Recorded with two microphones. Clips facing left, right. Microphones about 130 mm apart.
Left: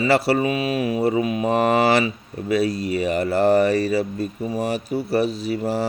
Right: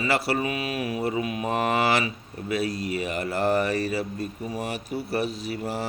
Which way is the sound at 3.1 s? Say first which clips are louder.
Left 7 dB; 35° left (ahead or behind).